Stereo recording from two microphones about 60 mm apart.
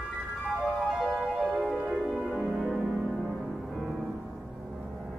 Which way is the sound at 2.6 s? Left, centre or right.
Centre.